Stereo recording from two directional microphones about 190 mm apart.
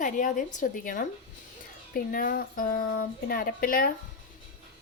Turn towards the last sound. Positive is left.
turn(degrees=50)  # may be behind; listen again after turning